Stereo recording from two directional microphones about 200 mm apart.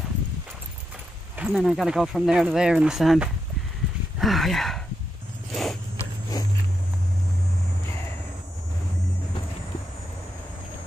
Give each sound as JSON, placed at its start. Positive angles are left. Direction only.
{"t": 1.4, "sound": "speech", "side_deg": 0}
{"t": 5.5, "sound": "zipper", "side_deg": 0}
{"t": 6.4, "sound": "walk", "side_deg": 20}